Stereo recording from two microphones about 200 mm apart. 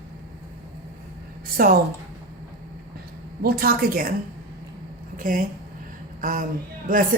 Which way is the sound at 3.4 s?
50° right (ahead or behind).